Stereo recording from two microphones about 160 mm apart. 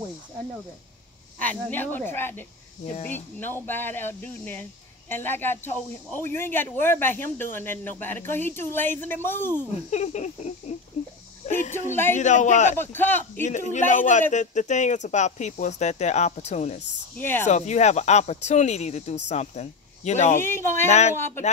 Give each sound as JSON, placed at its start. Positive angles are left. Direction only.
{"t": 1.4, "sound": "speech", "side_deg": 10}
{"t": 9.8, "sound": "speech", "side_deg": 45}
{"t": 11.9, "sound": "speech", "side_deg": 15}
{"t": 12.2, "sound": "speech", "side_deg": 50}
{"t": 12.7, "sound": "speech", "side_deg": 15}
{"t": 13.4, "sound": "speech", "side_deg": 50}
{"t": 17.2, "sound": "speech", "side_deg": 10}
{"t": 17.5, "sound": "speech", "side_deg": 45}
{"t": 20.3, "sound": "speech", "side_deg": 15}
{"t": 20.9, "sound": "speech", "side_deg": 45}